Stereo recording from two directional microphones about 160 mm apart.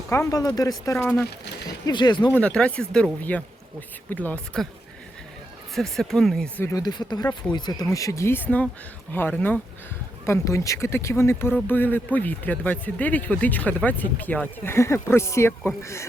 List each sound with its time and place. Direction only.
0.1 s speech: 20° left (ahead or behind)
1.9 s speech: 30° left (ahead or behind)
2.3 s speech: 5° left (ahead or behind)
5.7 s speech: centre (ahead or behind)
6.7 s speech: 25° left (ahead or behind)